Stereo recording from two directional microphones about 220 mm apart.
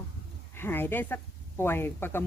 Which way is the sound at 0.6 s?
10° left (ahead or behind).